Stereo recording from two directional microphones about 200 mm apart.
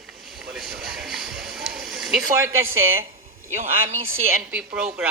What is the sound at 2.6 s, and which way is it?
Speech, 90° right.